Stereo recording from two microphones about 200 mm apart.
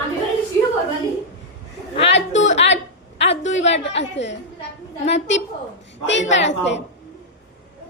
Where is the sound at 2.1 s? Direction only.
65° left (ahead or behind).